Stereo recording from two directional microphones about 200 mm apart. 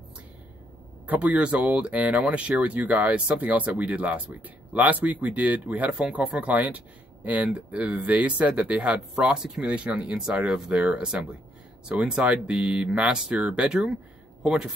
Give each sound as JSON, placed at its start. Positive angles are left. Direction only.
{"t": 1.0, "sound": "speech", "side_deg": -10}